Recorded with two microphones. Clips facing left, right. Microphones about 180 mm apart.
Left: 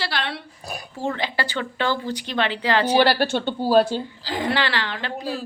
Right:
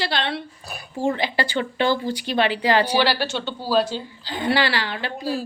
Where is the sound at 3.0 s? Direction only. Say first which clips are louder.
Left 3 dB; 50° left (ahead or behind).